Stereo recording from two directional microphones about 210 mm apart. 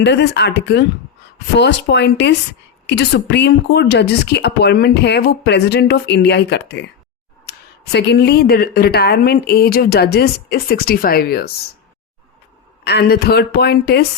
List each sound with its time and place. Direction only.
0.0 s speech: 55° left (ahead or behind)
12.8 s speech: 50° left (ahead or behind)